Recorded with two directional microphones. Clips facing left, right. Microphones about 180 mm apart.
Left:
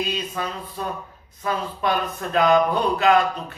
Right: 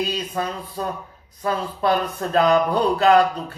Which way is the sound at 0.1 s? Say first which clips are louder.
Right 2 dB; 35° right (ahead or behind).